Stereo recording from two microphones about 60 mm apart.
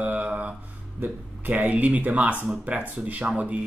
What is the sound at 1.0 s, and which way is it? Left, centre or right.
Speech, right.